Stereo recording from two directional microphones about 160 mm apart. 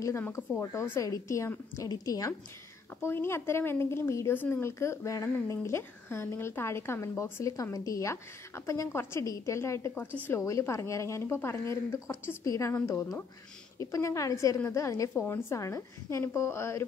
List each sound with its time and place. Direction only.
0.0 s speech: 15° left (ahead or behind)